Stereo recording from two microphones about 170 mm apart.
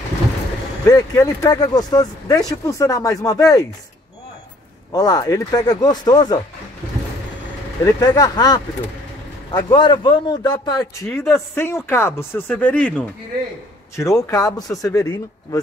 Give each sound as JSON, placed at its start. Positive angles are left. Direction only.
{"t": 0.8, "sound": "speech", "side_deg": 20}
{"t": 4.9, "sound": "speech", "side_deg": 20}
{"t": 7.8, "sound": "speech", "side_deg": 20}
{"t": 11.1, "sound": "speech", "side_deg": 15}
{"t": 13.9, "sound": "speech", "side_deg": 20}